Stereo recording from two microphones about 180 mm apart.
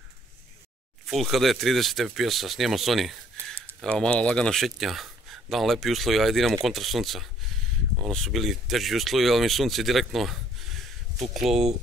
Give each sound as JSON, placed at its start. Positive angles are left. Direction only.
{"t": 1.0, "sound": "speech", "side_deg": 0}